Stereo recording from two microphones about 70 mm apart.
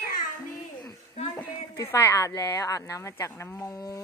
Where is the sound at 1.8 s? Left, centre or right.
Left.